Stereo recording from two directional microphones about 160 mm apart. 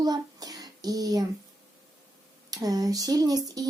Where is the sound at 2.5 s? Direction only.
25° right (ahead or behind).